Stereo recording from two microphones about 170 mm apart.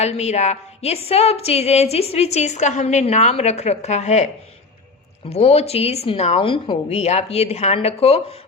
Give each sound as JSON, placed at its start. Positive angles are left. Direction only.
{"t": 0.0, "sound": "a woman's voice", "side_deg": 40}
{"t": 5.3, "sound": "a woman's voice", "side_deg": 35}